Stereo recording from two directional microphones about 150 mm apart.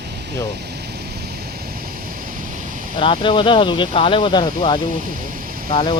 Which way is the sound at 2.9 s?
35° left (ahead or behind).